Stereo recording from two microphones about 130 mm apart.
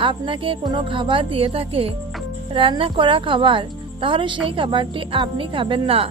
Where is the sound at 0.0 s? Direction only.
40° right (ahead or behind).